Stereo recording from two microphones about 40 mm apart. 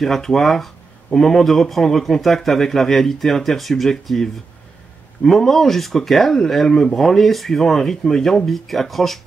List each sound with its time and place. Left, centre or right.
0.0 s speech: centre